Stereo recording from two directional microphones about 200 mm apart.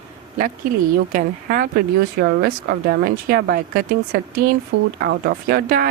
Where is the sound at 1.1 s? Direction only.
45° right (ahead or behind).